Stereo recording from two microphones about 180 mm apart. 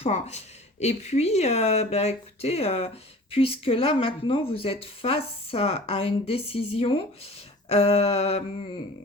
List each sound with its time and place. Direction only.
0.0 s speech: 40° left (ahead or behind)